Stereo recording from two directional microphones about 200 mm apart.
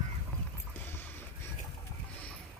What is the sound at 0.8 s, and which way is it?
Boat, 10° left (ahead or behind).